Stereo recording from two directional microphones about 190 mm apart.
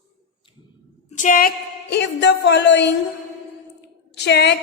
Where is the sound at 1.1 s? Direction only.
40° left (ahead or behind).